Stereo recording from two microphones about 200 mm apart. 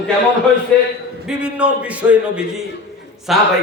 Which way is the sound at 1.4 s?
5° right (ahead or behind).